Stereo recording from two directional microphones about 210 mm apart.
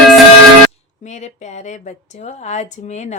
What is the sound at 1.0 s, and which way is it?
A woman's voice, 35° left (ahead or behind).